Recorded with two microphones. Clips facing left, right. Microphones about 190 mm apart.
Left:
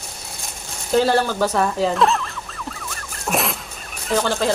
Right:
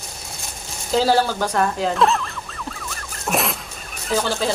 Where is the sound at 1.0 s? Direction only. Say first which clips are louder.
Even; centre (ahead or behind).